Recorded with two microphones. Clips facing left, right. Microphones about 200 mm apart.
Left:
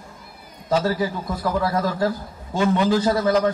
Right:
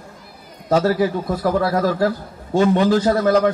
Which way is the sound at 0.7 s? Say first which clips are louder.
Right 5 dB; 60° right (ahead or behind).